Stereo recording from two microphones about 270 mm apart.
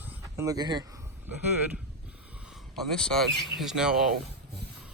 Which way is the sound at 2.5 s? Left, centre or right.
Centre.